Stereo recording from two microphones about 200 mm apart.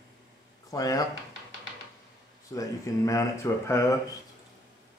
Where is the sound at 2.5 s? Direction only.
15° left (ahead or behind).